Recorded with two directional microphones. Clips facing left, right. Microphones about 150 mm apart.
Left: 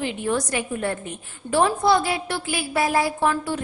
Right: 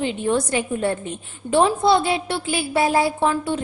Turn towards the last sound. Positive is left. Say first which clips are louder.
# right 2 dB
turn(degrees=-25)  # may be behind; listen again after turning